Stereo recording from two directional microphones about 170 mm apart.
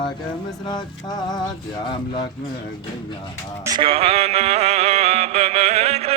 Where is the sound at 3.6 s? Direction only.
30° right (ahead or behind).